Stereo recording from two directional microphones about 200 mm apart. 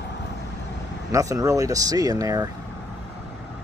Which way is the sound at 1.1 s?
15° right (ahead or behind).